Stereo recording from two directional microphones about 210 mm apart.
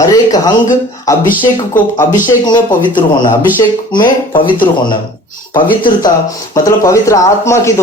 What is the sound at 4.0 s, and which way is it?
Speech, 25° left (ahead or behind).